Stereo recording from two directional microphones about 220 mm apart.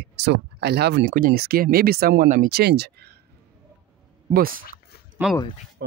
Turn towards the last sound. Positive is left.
turn(degrees=-10)  # may be behind; listen again after turning